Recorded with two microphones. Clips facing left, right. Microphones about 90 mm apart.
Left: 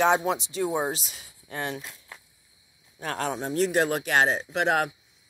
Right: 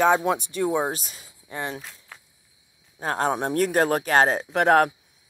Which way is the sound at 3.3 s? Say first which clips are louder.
Left 1 dB; 55° right (ahead or behind).